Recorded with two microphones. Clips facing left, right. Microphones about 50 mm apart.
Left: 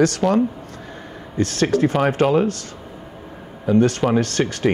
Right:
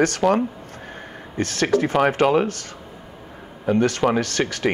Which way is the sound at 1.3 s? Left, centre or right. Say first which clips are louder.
Left 1 dB; right.